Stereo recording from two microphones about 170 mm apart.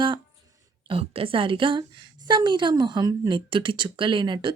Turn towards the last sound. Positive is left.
turn(degrees=-25)  # may be behind; listen again after turning